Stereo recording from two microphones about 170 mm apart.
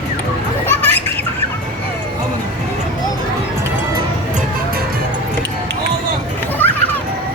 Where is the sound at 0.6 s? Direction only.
10° left (ahead or behind).